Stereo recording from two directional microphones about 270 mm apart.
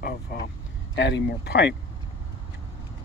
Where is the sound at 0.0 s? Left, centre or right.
Left.